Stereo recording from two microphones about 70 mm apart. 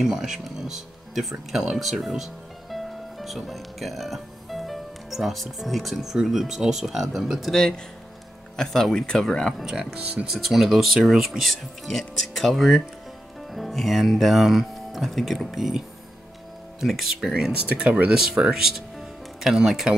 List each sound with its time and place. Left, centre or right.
0.0 s speech: centre
7.4 s speech: centre
9.6 s speech: centre
9.9 s speech: centre
10.3 s speech: centre
16.8 s speech: centre
17.5 s speech: centre